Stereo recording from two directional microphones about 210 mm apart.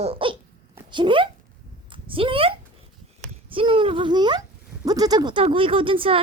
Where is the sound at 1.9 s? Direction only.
25° right (ahead or behind).